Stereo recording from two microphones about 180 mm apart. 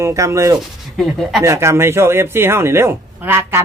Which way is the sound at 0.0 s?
15° right (ahead or behind).